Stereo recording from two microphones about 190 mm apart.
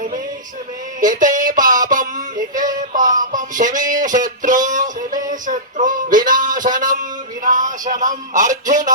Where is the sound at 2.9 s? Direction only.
45° right (ahead or behind).